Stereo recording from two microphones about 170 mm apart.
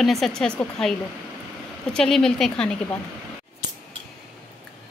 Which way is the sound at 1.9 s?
5° left (ahead or behind).